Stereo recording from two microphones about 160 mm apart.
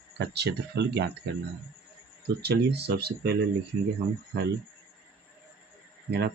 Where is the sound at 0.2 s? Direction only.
90° right.